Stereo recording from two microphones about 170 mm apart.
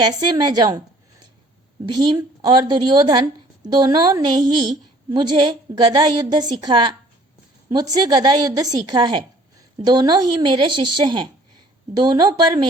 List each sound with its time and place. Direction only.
0.1 s a woman's voice: 25° right (ahead or behind)
1.9 s a woman's voice: 25° right (ahead or behind)